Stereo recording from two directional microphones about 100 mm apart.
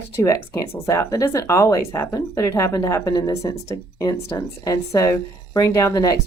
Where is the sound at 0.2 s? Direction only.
35° left (ahead or behind).